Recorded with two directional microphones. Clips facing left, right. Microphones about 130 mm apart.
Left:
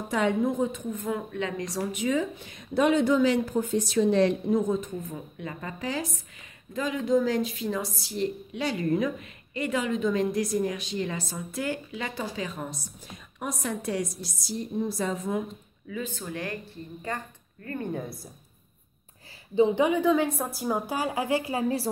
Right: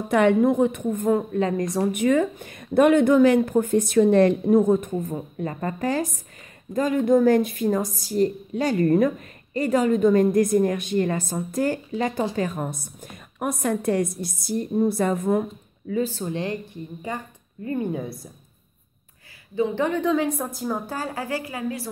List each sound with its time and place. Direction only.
0.1 s a woman's voice: 65° right (ahead or behind)
5.1 s a woman's voice: 45° right (ahead or behind)
15.9 s speech: 35° right (ahead or behind)
17.1 s a woman's voice: 15° right (ahead or behind)
18.0 s a woman's voice: centre (ahead or behind)
19.5 s a woman's voice: 15° left (ahead or behind)